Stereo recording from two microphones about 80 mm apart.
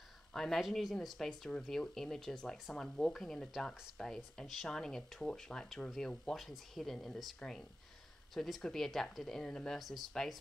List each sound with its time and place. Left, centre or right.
0.3 s speech: centre